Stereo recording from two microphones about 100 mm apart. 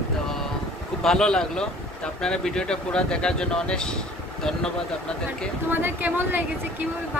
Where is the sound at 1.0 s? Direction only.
5° left (ahead or behind).